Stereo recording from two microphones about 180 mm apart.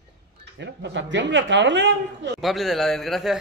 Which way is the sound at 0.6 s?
75° right (ahead or behind).